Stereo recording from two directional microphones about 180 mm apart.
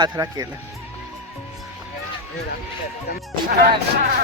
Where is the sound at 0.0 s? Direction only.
20° right (ahead or behind).